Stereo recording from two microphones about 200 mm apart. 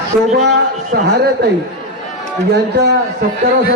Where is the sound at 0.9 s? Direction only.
55° right (ahead or behind).